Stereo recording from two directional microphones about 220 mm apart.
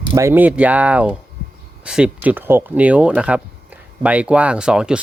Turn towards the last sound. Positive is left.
turn(degrees=-5)  # may be behind; listen again after turning